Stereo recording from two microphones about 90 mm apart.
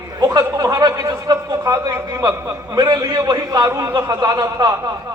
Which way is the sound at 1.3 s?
40° right (ahead or behind).